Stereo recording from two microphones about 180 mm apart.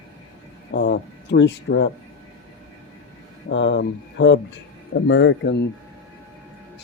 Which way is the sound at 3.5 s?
90° left.